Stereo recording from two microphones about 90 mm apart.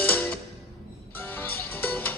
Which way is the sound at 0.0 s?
20° left (ahead or behind).